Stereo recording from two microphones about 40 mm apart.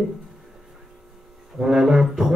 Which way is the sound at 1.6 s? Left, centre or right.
Centre.